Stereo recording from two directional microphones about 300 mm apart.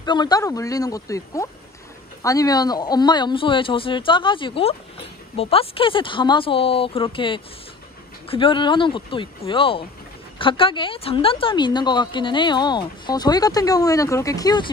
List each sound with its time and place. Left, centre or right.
0.0 s a woman's voice: centre